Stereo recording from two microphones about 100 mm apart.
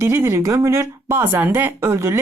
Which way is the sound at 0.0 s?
25° right (ahead or behind).